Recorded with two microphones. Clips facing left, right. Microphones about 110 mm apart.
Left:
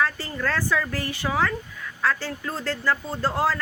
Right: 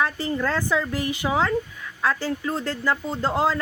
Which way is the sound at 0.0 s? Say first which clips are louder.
Right 2 dB; 20° right (ahead or behind).